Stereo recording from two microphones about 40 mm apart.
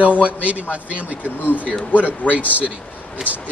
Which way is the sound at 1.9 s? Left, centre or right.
Left.